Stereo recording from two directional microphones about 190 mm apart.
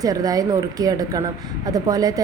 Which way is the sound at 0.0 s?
20° right (ahead or behind).